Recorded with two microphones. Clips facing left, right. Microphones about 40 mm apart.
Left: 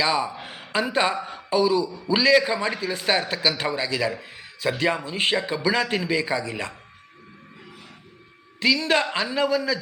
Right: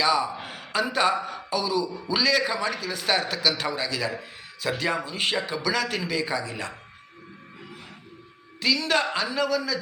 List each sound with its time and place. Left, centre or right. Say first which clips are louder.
0.0 s a man's voice: even; left
6.4 s speech: left 2 dB; left
8.6 s a man's voice: left 3 dB; left